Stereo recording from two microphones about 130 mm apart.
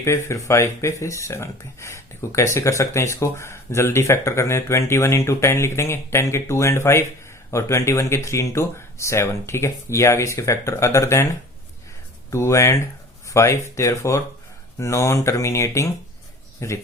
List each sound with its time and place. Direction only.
0.0 s speech: 20° left (ahead or behind)
12.3 s speech: 20° left (ahead or behind)